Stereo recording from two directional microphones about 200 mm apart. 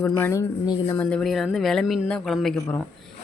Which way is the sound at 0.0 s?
15° left (ahead or behind).